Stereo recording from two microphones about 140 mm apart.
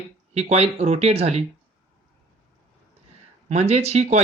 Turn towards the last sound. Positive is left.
turn(degrees=-55)  # may be behind; listen again after turning